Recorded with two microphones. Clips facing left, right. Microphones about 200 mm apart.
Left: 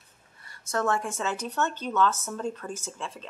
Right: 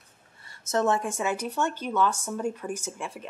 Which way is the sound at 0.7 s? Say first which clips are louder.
Right 3 dB; 20° right (ahead or behind).